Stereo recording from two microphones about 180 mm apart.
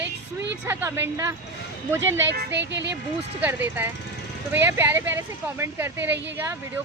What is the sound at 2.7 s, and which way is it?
Speech, 75° right (ahead or behind).